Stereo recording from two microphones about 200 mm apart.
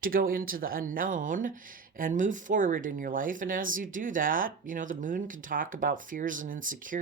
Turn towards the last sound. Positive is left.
turn(degrees=-40)  # may be behind; listen again after turning